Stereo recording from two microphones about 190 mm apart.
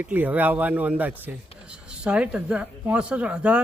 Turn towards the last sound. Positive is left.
turn(degrees=-5)  # may be behind; listen again after turning